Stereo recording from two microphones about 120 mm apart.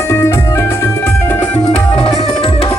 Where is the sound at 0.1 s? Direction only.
25° left (ahead or behind).